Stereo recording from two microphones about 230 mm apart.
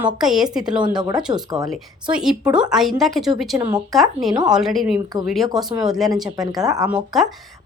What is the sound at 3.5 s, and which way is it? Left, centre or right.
Speech, centre.